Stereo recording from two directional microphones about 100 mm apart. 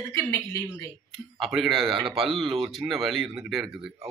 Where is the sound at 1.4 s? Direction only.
Centre (ahead or behind).